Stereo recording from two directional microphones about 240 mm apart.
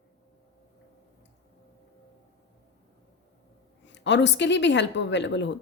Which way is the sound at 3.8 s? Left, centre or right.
Left.